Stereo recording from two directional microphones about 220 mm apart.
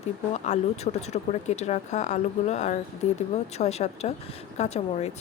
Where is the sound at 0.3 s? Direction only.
30° left (ahead or behind).